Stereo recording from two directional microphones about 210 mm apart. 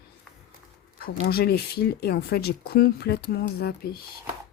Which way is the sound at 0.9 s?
50° left (ahead or behind).